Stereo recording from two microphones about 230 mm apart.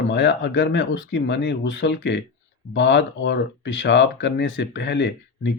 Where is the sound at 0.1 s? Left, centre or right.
Left.